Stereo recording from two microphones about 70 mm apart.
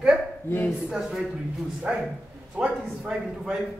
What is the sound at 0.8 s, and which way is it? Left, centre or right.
Speech, centre.